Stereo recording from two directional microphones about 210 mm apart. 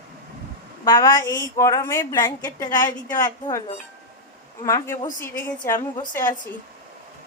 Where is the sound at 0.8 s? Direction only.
15° left (ahead or behind).